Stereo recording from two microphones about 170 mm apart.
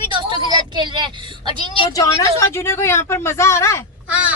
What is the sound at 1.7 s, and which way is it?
A woman's voice, 25° left (ahead or behind).